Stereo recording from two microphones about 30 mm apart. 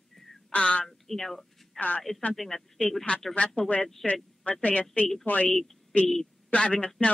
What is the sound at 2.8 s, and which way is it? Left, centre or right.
Speech, left.